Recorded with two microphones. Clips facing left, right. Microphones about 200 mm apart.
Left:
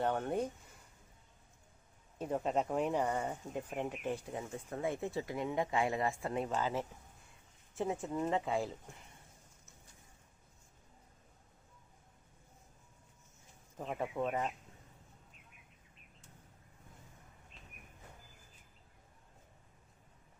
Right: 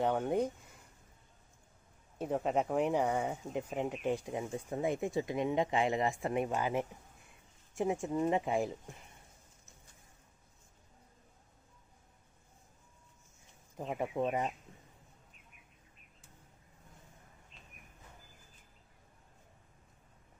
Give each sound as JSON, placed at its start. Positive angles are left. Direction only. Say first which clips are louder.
{"t": 0.0, "sound": "speech", "louder": "right 3 dB", "side_deg": -10}
{"t": 2.1, "sound": "speech", "louder": "right 2 dB", "side_deg": -10}
{"t": 13.7, "sound": "speech", "louder": "right 2 dB", "side_deg": -15}